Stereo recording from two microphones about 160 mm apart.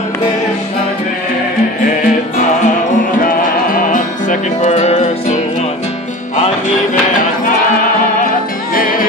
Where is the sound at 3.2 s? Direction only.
60° left (ahead or behind).